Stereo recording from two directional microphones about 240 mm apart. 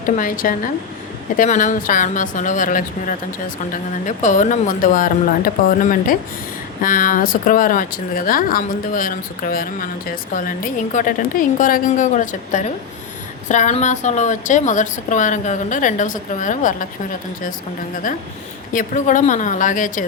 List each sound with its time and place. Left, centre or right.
0.2 s a woman's voice: left
18.7 s a woman's voice: left